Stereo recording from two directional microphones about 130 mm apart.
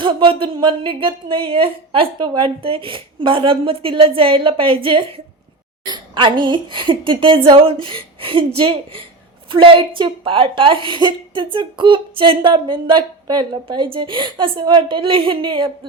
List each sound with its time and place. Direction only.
0.0 s a woman's voice: 40° right (ahead or behind)